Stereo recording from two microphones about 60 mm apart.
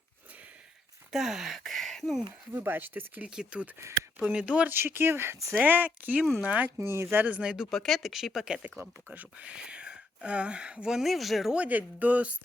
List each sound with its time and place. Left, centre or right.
1.1 s speech: centre
2.5 s speech: right
3.2 s speech: centre
4.7 s speech: right
5.5 s speech: right
6.8 s speech: right
7.2 s speech: right
7.7 s speech: centre
8.8 s speech: right; by 11.0 s centre
11.0 s speech: centre
11.5 s speech: right